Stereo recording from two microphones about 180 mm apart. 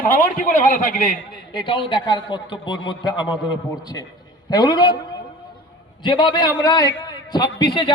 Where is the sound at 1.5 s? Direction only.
30° left (ahead or behind).